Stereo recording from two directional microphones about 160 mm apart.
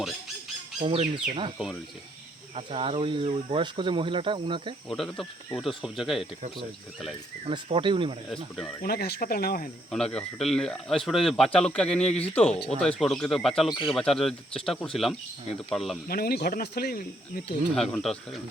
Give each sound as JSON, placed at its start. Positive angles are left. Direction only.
{"t": 0.8, "sound": "speech", "side_deg": -35}
{"t": 2.6, "sound": "speech", "side_deg": -35}
{"t": 4.9, "sound": "speech", "side_deg": 0}
{"t": 7.4, "sound": "speech", "side_deg": -30}
{"t": 8.8, "sound": "speech", "side_deg": 75}
{"t": 9.9, "sound": "speech", "side_deg": 5}
{"t": 16.0, "sound": "speech", "side_deg": 70}
{"t": 17.9, "sound": "speech", "side_deg": 5}